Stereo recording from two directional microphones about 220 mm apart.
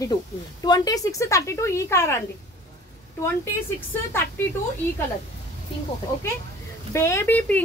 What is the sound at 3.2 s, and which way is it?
A woman's voice, 10° left (ahead or behind).